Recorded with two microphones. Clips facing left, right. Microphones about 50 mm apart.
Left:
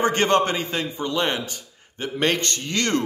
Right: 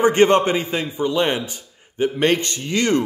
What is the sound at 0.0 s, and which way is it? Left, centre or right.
A man's voice, centre.